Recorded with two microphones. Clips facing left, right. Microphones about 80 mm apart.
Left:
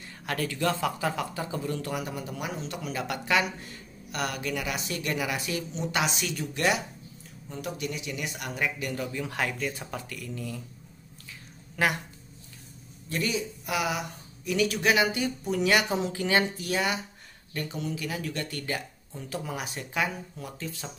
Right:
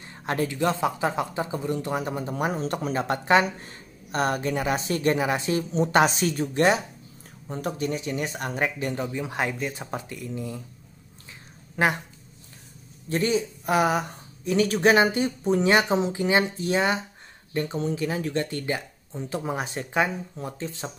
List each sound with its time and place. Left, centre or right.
0.2 s a man's voice: right
11.7 s speech: right
13.1 s a man's voice: right